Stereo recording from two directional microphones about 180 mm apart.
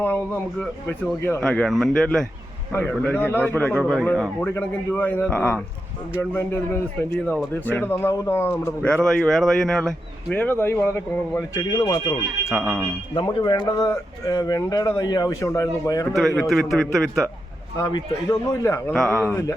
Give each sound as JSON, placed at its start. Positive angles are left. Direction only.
{"t": 1.2, "sound": "speech", "side_deg": 15}
{"t": 1.5, "sound": "speech", "side_deg": 5}
{"t": 7.7, "sound": "speech", "side_deg": 10}
{"t": 12.5, "sound": "speech", "side_deg": -5}
{"t": 13.1, "sound": "speech", "side_deg": 25}
{"t": 16.1, "sound": "speech", "side_deg": 0}
{"t": 17.7, "sound": "speech", "side_deg": 20}
{"t": 18.9, "sound": "speech", "side_deg": 5}